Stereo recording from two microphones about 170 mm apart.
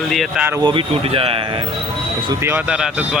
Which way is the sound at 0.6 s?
30° right (ahead or behind).